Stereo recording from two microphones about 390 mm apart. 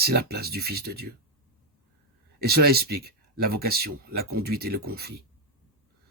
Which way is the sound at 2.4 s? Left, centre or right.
Right.